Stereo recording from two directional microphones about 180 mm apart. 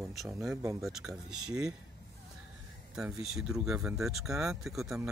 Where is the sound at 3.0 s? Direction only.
5° right (ahead or behind).